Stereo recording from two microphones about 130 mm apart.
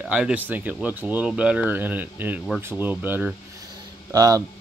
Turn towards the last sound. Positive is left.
turn(degrees=-30)  # may be behind; listen again after turning